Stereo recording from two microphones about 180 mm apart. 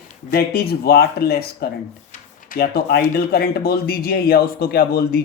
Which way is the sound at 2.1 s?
50° left (ahead or behind).